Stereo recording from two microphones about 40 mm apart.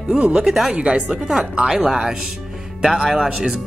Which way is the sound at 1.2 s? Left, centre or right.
Centre.